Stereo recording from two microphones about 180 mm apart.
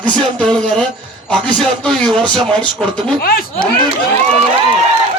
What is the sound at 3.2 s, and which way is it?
Speech, 55° left (ahead or behind).